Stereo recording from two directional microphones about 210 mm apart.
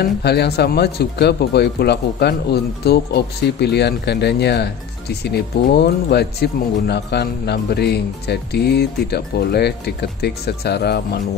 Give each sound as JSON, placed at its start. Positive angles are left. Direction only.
{"t": 0.0, "sound": "speech", "side_deg": 50}